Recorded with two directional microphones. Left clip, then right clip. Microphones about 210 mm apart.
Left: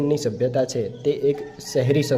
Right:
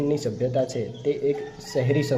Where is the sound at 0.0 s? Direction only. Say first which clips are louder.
Left 3 dB; 25° left (ahead or behind).